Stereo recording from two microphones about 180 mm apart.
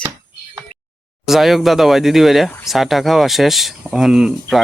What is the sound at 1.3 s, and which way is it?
Speech, centre (ahead or behind).